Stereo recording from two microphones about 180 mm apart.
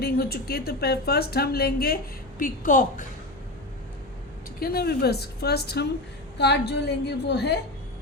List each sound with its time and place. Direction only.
0.0 s a woman's voice: 60° left (ahead or behind)
2.4 s a woman's voice: 50° left (ahead or behind)
4.6 s a woman's voice: 60° left (ahead or behind)